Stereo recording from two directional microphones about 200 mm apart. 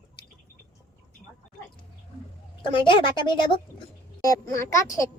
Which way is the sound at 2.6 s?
25° left (ahead or behind).